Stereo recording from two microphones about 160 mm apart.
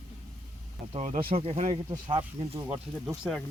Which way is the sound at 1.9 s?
25° right (ahead or behind).